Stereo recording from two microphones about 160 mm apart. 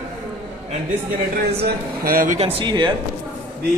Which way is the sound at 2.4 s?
30° right (ahead or behind).